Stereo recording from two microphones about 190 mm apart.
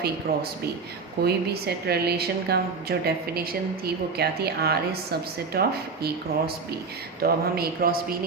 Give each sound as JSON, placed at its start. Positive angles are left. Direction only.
{"t": 0.3, "sound": "a woman's voice", "side_deg": -50}